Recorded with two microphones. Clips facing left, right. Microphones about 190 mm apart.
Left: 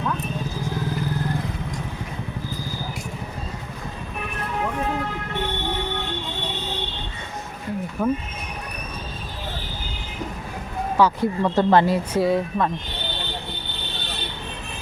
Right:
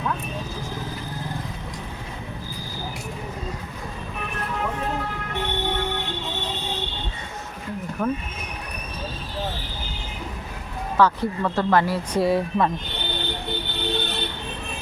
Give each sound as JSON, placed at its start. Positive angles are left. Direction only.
{"t": 8.0, "sound": "speech", "side_deg": 5}
{"t": 10.9, "sound": "speech", "side_deg": 15}
{"t": 12.1, "sound": "speech", "side_deg": 0}